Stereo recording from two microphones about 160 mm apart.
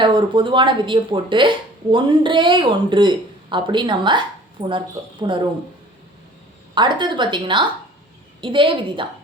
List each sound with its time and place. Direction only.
0.0 s speech: 30° right (ahead or behind)
6.7 s a woman's voice: 30° right (ahead or behind)